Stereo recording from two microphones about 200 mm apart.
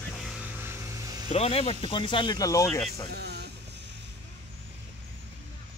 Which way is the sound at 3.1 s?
55° right (ahead or behind).